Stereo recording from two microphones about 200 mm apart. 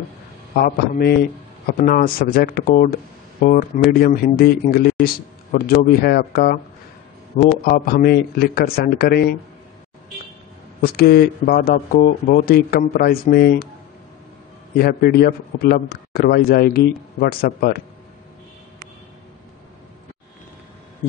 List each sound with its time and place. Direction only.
0.6 s a man's voice: 50° left (ahead or behind)
10.8 s a man's voice: 50° left (ahead or behind)
14.8 s a man's voice: 50° left (ahead or behind)